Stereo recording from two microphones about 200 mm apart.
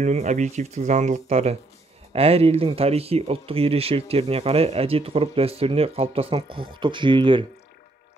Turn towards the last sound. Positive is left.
turn(degrees=-25)  # may be behind; listen again after turning